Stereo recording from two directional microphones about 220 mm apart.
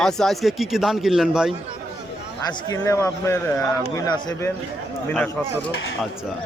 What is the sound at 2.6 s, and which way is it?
A man's voice, 10° left (ahead or behind).